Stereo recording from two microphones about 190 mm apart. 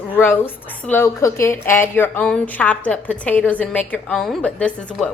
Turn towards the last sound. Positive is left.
turn(degrees=5)  # may be behind; listen again after turning